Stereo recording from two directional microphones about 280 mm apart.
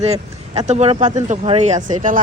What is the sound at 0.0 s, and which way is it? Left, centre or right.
Speech, right.